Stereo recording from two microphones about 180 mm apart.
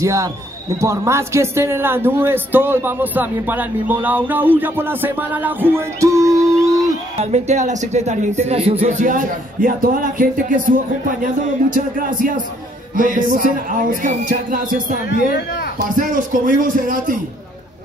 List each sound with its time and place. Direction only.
0.0 s speech: 15° right (ahead or behind)
7.2 s a man's voice: 40° right (ahead or behind)
11.7 s speech: 45° right (ahead or behind)
16.0 s speech: 45° right (ahead or behind)